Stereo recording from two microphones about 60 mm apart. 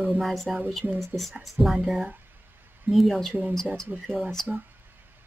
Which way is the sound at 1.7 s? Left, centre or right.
Centre.